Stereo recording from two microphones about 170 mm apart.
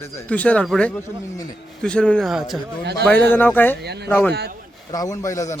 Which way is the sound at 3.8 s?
75° right (ahead or behind).